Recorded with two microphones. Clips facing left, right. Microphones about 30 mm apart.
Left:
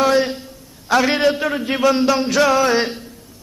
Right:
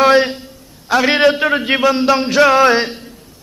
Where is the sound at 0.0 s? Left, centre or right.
Right.